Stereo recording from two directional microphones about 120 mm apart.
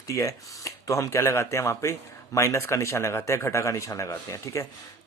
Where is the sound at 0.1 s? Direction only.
25° left (ahead or behind).